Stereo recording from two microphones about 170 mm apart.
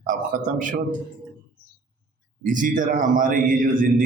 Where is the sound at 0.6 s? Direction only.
50° right (ahead or behind).